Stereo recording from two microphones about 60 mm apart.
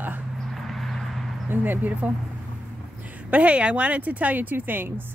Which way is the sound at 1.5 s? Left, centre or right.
Right.